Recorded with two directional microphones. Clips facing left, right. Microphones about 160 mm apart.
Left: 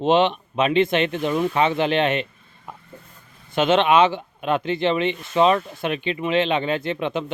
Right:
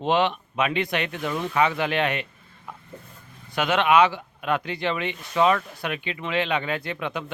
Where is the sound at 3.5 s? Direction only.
25° left (ahead or behind).